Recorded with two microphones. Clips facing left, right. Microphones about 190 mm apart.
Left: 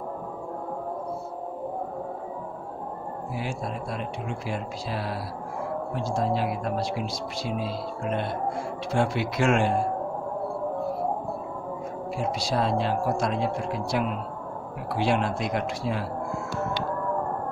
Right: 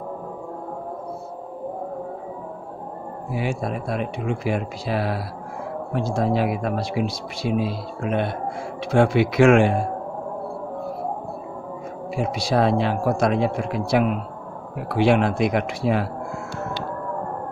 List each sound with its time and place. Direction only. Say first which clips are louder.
3.3 s speech: right 7 dB; 65° right (ahead or behind)
12.2 s speech: right 6 dB; 65° right (ahead or behind)